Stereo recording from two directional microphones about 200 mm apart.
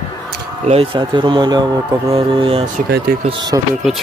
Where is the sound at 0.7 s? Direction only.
25° right (ahead or behind).